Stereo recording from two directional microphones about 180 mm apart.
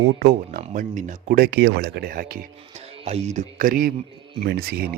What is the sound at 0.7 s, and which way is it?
Speech, 40° right (ahead or behind).